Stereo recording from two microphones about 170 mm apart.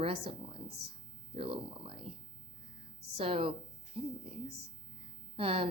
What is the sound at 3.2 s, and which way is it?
Speech, 35° right (ahead or behind).